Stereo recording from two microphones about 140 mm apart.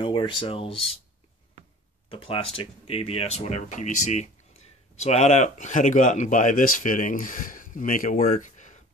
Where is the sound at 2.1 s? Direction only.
40° left (ahead or behind).